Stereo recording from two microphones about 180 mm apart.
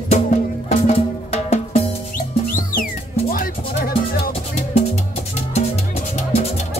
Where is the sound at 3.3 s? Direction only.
55° left (ahead or behind).